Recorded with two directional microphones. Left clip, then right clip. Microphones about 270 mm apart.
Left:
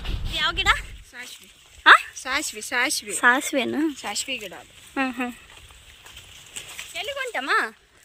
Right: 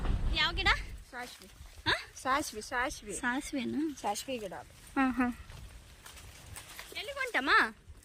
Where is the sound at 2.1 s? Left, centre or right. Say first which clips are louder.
Left 5 dB; right.